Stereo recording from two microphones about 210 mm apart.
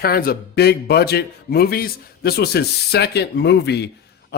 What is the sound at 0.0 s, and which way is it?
Speech, 45° left (ahead or behind).